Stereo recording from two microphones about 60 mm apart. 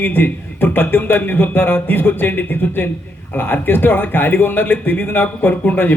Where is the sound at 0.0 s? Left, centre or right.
Left.